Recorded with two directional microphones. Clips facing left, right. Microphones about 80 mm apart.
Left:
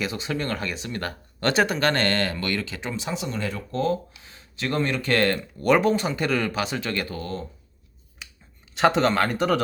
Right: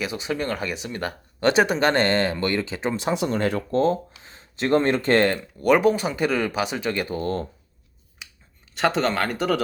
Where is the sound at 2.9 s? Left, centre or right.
Right.